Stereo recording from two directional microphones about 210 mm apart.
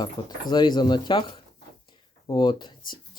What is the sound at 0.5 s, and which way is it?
Speech, 20° left (ahead or behind).